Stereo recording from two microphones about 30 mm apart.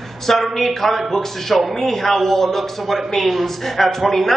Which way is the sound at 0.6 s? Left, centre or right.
Centre.